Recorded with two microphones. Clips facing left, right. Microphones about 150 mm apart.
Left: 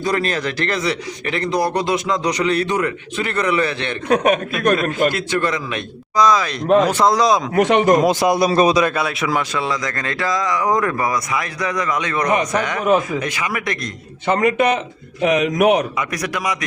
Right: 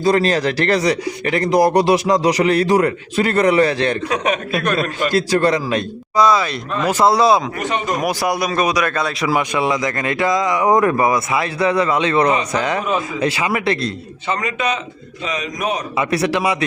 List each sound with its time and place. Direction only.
0.0 s a man's voice: 35° right (ahead or behind)
4.1 s a man's voice: 45° left (ahead or behind)
5.1 s a man's voice: 35° right (ahead or behind)
6.1 s speech: 5° right (ahead or behind)
7.5 s speech: 85° left
8.0 s a man's voice: 20° left (ahead or behind)
8.9 s speech: 10° left (ahead or behind)
9.2 s speech: 10° right (ahead or behind); by 13.9 s 30° right (ahead or behind)
14.3 s a man's voice: 55° left (ahead or behind)
15.2 s a man's voice: 65° left (ahead or behind)
16.0 s speech: 30° right (ahead or behind)